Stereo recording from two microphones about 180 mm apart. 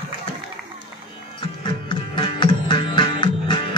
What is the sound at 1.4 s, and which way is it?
Music, 25° left (ahead or behind).